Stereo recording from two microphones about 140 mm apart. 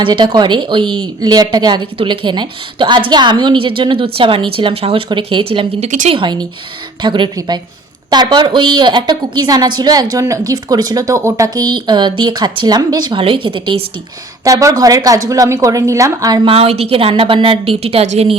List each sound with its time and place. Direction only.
0.0 s a woman's voice: 35° right (ahead or behind)
14.4 s a woman's voice: 25° right (ahead or behind)
16.5 s a woman's voice: 45° right (ahead or behind)